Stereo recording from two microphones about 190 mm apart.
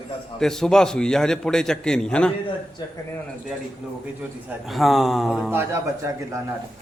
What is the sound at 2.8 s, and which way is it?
Speech, 20° left (ahead or behind).